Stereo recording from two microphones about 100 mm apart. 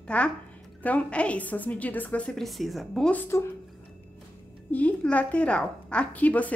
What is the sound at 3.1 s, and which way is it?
Speech, 20° left (ahead or behind).